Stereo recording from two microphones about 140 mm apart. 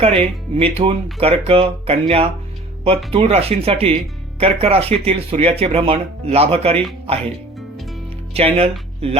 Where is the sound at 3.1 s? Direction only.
45° right (ahead or behind).